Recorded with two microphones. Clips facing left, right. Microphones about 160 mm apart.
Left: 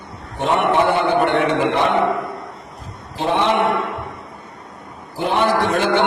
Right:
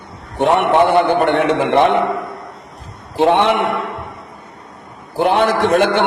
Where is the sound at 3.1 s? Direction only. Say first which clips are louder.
Right 6 dB; 65° right (ahead or behind).